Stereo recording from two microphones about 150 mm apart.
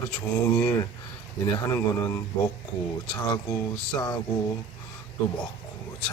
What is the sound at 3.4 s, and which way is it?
Speech, 25° left (ahead or behind).